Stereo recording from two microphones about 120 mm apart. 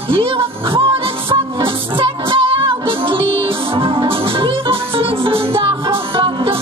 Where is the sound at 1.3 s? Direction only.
45° right (ahead or behind).